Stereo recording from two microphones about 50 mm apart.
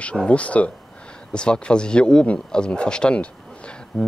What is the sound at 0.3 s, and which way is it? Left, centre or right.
Speech, left.